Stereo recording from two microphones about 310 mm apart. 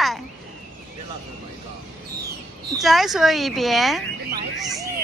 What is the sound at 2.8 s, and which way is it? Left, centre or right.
Speech, centre.